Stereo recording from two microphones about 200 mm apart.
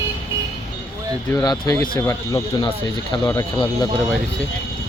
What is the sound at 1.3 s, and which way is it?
Speech, 20° left (ahead or behind).